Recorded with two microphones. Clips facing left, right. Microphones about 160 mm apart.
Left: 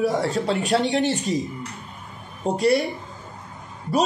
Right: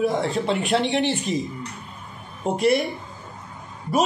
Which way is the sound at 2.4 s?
35° left (ahead or behind).